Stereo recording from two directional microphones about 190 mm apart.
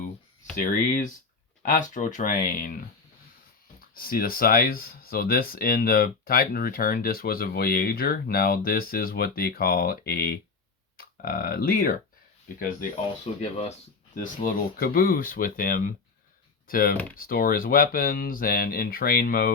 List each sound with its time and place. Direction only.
0.6 s speech: 45° left (ahead or behind)
3.9 s speech: 50° left (ahead or behind)
13.4 s speech: 30° left (ahead or behind)
14.2 s speech: 50° left (ahead or behind)